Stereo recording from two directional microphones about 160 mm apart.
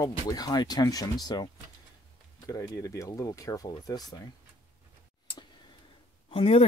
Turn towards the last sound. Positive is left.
turn(degrees=35)  # may be behind; listen again after turning